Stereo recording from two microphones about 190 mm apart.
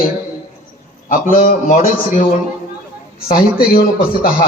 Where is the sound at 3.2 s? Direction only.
50° left (ahead or behind).